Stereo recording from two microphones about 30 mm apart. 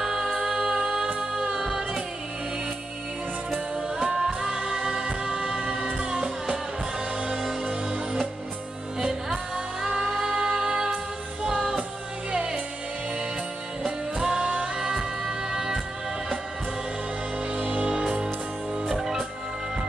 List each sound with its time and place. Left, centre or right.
0.4 s music: right
1.5 s music: centre
4.0 s music: centre
4.6 s music: right
7.6 s music: right
9.0 s music: centre
13.8 s music: right
17.6 s music: right
17.8 s music: right
18.9 s music: centre